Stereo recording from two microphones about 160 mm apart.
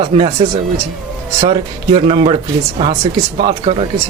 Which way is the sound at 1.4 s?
35° right (ahead or behind).